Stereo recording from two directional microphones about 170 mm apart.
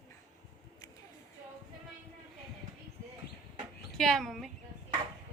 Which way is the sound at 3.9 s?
Centre (ahead or behind).